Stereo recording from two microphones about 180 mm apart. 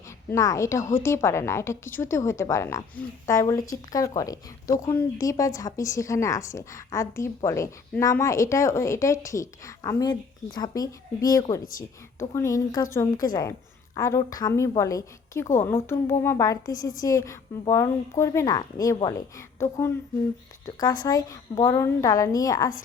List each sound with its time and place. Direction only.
0.3 s a woman's voice: 15° left (ahead or behind)
11.6 s a woman's voice: 50° left (ahead or behind)
12.3 s a woman's voice: 15° left (ahead or behind)